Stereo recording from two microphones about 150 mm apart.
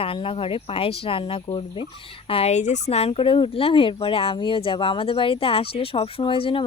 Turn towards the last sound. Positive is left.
turn(degrees=35)  # may be behind; listen again after turning